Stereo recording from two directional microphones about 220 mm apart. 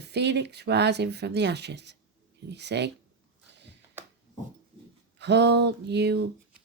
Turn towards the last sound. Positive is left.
turn(degrees=-50)  # may be behind; listen again after turning